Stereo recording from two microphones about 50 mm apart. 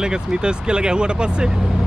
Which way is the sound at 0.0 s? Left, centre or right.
Centre.